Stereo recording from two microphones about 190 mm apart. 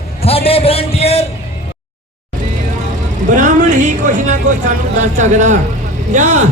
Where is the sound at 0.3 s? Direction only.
30° left (ahead or behind).